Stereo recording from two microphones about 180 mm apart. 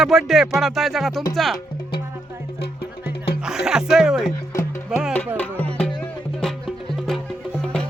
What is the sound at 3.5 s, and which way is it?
Speech, 5° right (ahead or behind).